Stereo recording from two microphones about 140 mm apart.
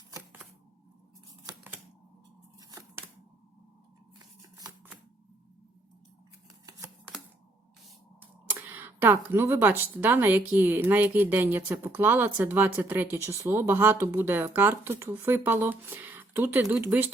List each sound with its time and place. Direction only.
4.2 s scissors: 25° right (ahead or behind)
6.7 s a sound: 25° right (ahead or behind)
8.2 s speech: 15° right (ahead or behind)